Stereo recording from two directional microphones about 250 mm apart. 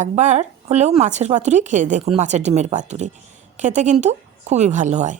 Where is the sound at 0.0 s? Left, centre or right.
Right.